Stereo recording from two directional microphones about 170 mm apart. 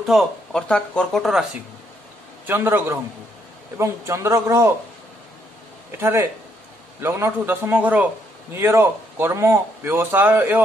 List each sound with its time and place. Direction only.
0.0 s speech: centre (ahead or behind)
2.4 s speech: 10° right (ahead or behind)
5.9 s speech: 15° right (ahead or behind)